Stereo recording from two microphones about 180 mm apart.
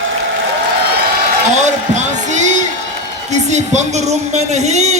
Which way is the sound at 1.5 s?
40° right (ahead or behind).